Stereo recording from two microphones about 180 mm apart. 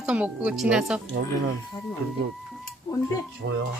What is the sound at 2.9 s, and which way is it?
Dishes, 20° left (ahead or behind).